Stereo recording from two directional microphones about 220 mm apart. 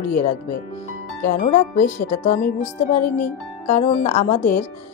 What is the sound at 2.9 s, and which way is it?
Speech, 35° left (ahead or behind).